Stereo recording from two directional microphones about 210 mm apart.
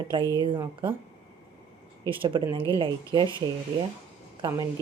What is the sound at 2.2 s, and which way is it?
Speech, 25° right (ahead or behind).